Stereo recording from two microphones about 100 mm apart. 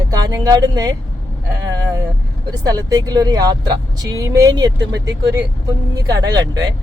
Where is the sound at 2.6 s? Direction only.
40° right (ahead or behind).